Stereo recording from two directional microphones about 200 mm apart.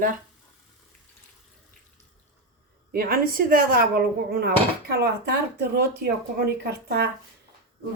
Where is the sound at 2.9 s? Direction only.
45° right (ahead or behind).